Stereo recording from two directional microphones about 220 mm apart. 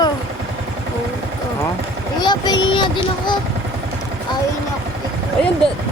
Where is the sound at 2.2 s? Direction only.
20° left (ahead or behind).